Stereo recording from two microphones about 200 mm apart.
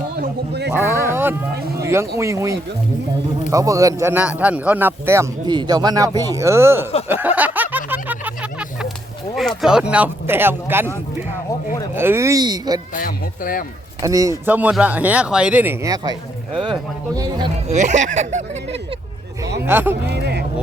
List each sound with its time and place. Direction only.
0.2 s a sound: 55° right (ahead or behind)
0.8 s a sound: 10° right (ahead or behind)
1.8 s a man's voice: 15° right (ahead or behind)
7.1 s snicker: 10° right (ahead or behind)
9.3 s speech: centre (ahead or behind)
11.9 s a man's voice: 10° right (ahead or behind)
12.9 s speech: 45° left (ahead or behind)
14.0 s a man's voice: 15° right (ahead or behind)
17.7 s speech: 35° right (ahead or behind)
19.6 s a man's voice: 10° right (ahead or behind)
20.1 s speech: 55° right (ahead or behind)